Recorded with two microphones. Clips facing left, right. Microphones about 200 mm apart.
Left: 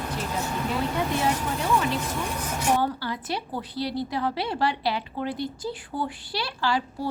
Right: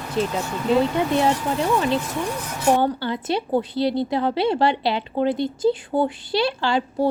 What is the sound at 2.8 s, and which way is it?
Speech, 25° right (ahead or behind).